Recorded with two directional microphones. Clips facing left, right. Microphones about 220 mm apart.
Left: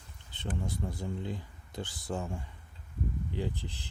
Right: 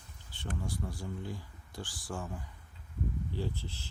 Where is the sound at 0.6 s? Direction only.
20° left (ahead or behind).